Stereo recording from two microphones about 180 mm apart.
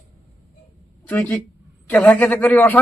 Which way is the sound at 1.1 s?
5° left (ahead or behind).